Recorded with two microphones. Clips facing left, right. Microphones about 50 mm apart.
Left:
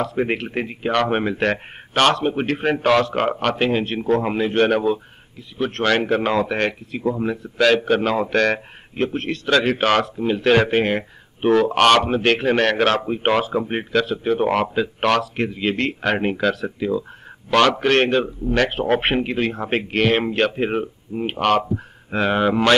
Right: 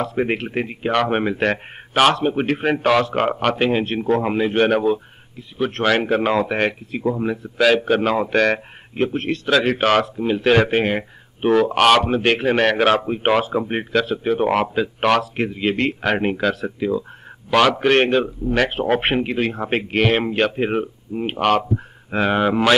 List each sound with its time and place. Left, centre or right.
0.0 s speech: centre